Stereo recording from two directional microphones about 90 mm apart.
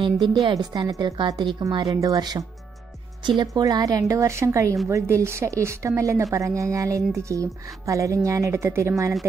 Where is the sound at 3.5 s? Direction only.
45° right (ahead or behind).